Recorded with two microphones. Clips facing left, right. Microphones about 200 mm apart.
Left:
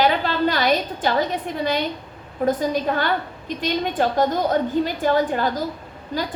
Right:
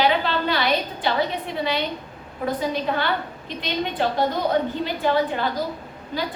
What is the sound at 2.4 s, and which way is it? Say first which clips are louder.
A woman's voice: left 4 dB; 45° left (ahead or behind).